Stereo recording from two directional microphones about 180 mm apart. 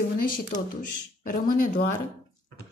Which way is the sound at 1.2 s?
50° left (ahead or behind).